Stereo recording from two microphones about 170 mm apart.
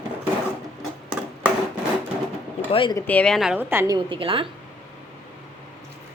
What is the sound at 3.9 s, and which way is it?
Speech, 30° right (ahead or behind).